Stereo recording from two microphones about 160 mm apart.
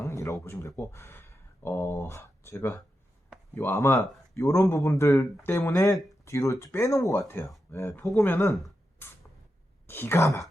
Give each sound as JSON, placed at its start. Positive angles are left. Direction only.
{"t": 0.0, "sound": "speech", "side_deg": 20}
{"t": 9.0, "sound": "a sound", "side_deg": 15}
{"t": 9.8, "sound": "speech", "side_deg": 15}